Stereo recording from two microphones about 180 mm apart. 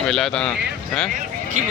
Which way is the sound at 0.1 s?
Centre (ahead or behind).